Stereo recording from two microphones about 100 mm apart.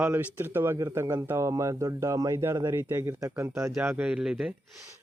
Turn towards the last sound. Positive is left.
turn(degrees=-5)  # may be behind; listen again after turning